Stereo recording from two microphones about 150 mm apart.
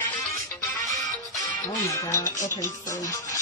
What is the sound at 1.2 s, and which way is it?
Music, 25° left (ahead or behind).